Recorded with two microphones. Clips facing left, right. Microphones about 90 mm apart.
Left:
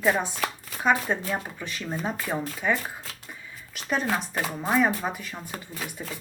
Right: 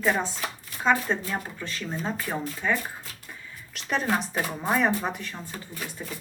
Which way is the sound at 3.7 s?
Centre (ahead or behind).